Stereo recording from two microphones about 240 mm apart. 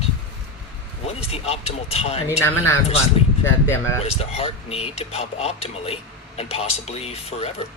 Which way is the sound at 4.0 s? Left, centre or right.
Left.